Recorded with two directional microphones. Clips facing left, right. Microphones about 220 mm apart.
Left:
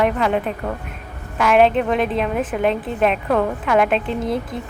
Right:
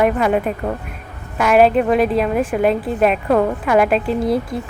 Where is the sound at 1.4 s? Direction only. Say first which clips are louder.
Right 2 dB; 5° right (ahead or behind).